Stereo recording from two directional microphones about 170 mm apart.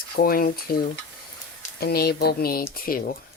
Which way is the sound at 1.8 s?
65° left (ahead or behind).